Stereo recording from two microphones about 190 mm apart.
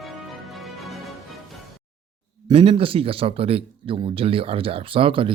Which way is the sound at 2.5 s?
30° right (ahead or behind).